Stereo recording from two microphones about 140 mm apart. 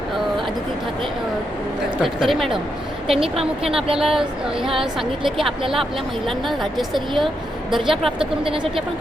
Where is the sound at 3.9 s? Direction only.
5° right (ahead or behind).